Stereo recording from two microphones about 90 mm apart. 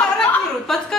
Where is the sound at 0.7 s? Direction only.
5° left (ahead or behind).